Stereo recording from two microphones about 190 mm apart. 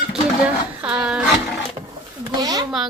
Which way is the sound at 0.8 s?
5° right (ahead or behind).